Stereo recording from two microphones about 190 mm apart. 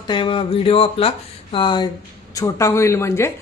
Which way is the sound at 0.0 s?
25° left (ahead or behind).